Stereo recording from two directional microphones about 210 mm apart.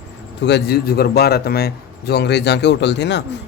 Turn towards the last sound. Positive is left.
turn(degrees=55)  # may be behind; listen again after turning